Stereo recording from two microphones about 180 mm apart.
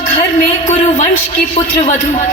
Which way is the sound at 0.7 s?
45° left (ahead or behind).